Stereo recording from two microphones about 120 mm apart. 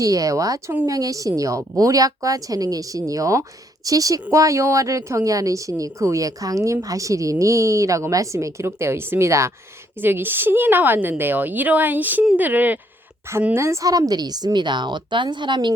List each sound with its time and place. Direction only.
0.0 s a woman's voice: 30° right (ahead or behind)